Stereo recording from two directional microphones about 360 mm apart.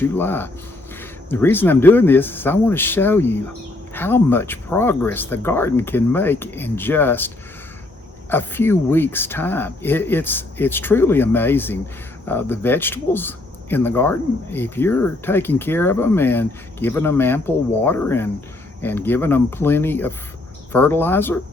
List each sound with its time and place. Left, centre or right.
0.0 s speech: centre
8.3 s speech: centre